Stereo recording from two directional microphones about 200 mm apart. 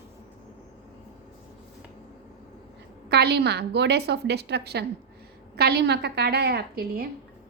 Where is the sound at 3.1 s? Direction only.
55° right (ahead or behind).